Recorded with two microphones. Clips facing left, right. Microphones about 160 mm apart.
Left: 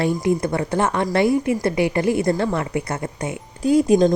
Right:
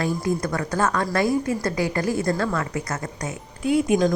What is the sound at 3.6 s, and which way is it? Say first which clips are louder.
Speech: left 4 dB; 35° left (ahead or behind).